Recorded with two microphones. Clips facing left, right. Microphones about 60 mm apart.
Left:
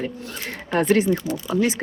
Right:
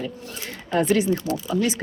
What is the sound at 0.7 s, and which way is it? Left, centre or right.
Speech, left.